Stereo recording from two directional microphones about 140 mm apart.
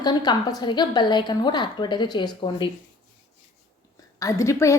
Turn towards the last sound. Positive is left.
turn(degrees=20)  # may be behind; listen again after turning